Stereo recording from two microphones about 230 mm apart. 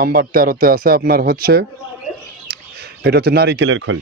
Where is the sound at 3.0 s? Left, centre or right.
Right.